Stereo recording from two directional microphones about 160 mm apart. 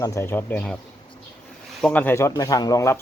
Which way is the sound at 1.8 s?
10° left (ahead or behind).